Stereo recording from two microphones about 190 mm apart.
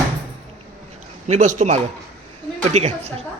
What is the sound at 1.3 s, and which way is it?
A man's voice, 40° right (ahead or behind).